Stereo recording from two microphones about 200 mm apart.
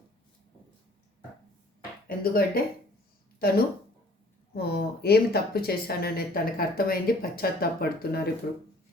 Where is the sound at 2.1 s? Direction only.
50° left (ahead or behind).